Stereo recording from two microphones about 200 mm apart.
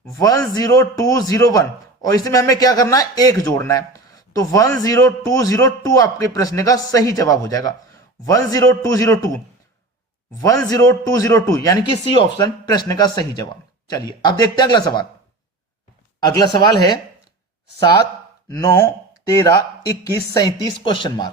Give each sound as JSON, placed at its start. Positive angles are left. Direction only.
{"t": 0.0, "sound": "a man's voice", "side_deg": 15}
{"t": 16.2, "sound": "speech", "side_deg": 20}
{"t": 18.4, "sound": "a man's voice", "side_deg": 15}